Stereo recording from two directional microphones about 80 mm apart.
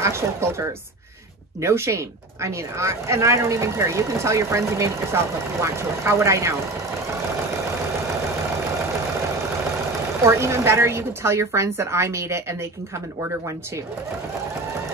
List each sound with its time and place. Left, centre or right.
0.0 s speech: right
10.2 s speech: right